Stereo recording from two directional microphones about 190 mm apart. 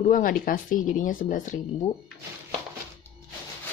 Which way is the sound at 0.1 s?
50° left (ahead or behind).